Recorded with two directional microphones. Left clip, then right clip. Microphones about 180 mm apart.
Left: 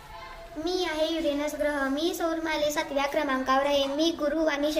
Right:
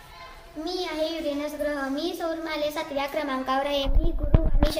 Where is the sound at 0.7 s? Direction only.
10° left (ahead or behind).